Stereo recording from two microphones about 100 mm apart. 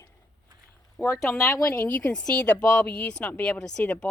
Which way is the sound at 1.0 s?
25° left (ahead or behind).